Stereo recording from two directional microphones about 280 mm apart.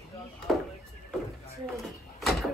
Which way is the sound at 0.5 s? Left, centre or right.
Centre.